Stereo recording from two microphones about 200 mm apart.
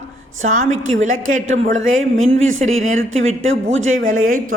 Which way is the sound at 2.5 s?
90° right.